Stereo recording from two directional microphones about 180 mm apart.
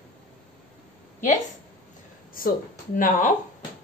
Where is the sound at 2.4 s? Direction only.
50° left (ahead or behind).